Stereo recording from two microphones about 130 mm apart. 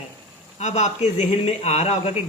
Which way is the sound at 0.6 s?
60° left (ahead or behind).